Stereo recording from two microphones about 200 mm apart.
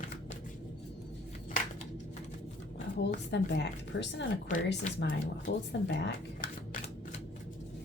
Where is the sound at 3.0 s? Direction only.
60° left (ahead or behind).